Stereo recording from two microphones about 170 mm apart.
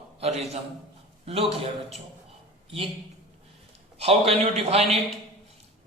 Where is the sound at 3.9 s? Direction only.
40° right (ahead or behind).